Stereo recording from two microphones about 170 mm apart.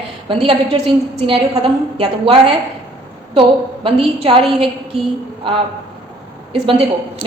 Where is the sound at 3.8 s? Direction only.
30° right (ahead or behind).